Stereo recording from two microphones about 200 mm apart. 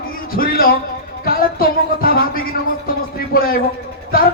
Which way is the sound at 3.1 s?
45° left (ahead or behind).